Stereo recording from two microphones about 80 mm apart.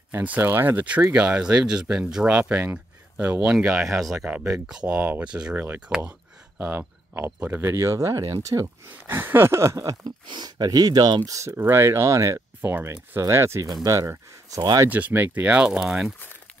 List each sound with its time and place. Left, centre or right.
0.4 s speech: right
2.6 s a sound: right
3.5 s speech: centre
4.9 s speech: right
7.7 s speech: right
9.0 s speech: right
10.2 s speech: right
11.3 s speech: right
14.6 s speech: right
14.9 s speech: centre